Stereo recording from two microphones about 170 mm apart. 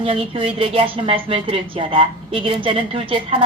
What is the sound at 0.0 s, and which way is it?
A woman's voice, 30° right (ahead or behind).